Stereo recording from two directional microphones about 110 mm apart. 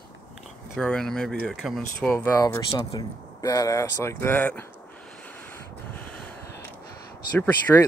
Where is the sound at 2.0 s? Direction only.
10° left (ahead or behind).